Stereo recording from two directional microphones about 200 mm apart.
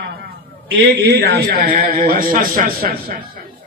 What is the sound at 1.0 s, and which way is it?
A man's voice, 55° right (ahead or behind).